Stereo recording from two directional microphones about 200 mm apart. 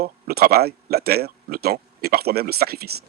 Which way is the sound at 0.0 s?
50° right (ahead or behind).